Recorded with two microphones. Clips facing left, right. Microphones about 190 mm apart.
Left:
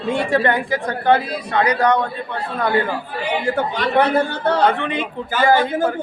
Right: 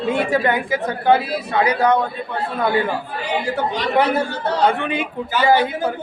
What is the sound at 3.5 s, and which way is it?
Speech, 55° left (ahead or behind).